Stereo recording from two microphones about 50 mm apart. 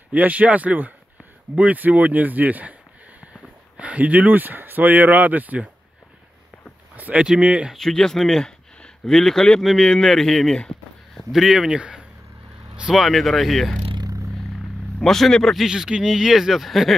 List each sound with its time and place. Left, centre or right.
0.1 s speech: right
3.7 s speech: right
7.2 s speech: right
7.7 s speech: centre
11.5 s speech: centre
12.9 s speech: centre
15.0 s speech: centre
15.6 s speech: centre